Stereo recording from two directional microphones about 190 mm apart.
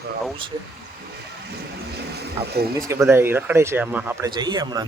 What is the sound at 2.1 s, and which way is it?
Vehicle, 60° right (ahead or behind).